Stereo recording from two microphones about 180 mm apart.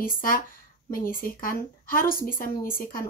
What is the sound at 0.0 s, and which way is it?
Speech, 50° left (ahead or behind).